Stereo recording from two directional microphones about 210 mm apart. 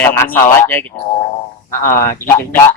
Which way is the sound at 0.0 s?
10° left (ahead or behind).